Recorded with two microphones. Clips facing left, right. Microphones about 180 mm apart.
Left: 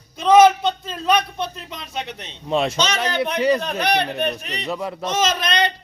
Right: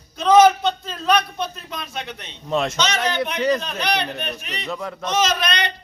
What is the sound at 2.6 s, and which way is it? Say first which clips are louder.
Speech: left 1 dB; 30° left (ahead or behind).